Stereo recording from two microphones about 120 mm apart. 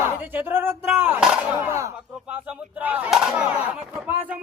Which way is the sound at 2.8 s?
15° right (ahead or behind).